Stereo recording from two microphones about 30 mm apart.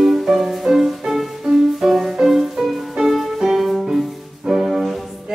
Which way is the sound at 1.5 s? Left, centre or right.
Right.